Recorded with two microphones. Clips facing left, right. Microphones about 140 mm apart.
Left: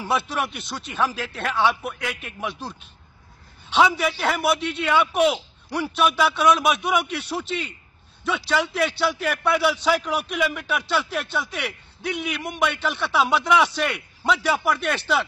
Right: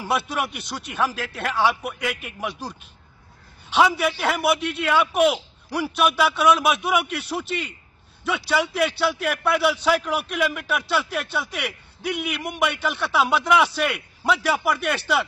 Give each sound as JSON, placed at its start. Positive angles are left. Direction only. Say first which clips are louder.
{"t": 0.0, "sound": "a man's voice", "louder": "even", "side_deg": -5}
{"t": 3.7, "sound": "a man's voice", "louder": "even", "side_deg": -5}